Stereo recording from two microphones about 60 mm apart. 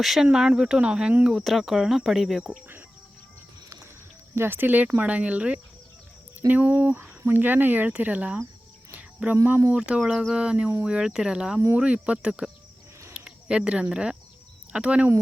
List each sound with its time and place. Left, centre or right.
0.0 s cricket: centre
0.3 s speech: centre
1.3 s cricket: centre
4.4 s speech: right
6.5 s speech: right
8.9 s cricket: right
9.7 s speech: centre
13.1 s a sound: centre
13.9 s speech: centre